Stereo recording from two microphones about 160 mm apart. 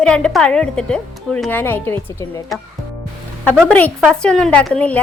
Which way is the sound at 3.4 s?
10° left (ahead or behind).